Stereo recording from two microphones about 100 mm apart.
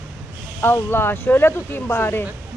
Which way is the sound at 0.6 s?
20° left (ahead or behind).